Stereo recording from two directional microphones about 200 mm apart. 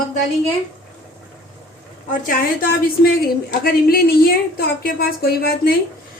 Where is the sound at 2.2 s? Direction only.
45° left (ahead or behind).